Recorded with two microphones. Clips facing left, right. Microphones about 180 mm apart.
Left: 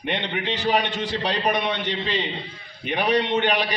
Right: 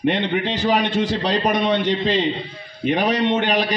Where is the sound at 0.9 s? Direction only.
40° right (ahead or behind).